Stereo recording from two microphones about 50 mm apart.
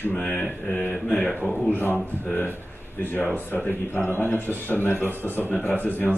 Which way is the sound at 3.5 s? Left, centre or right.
Left.